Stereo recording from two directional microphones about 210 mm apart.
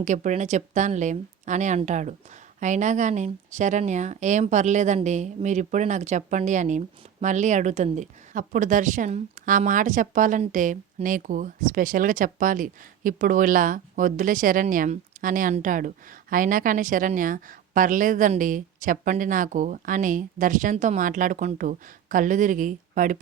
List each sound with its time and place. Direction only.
0.0 s speech: 35° right (ahead or behind)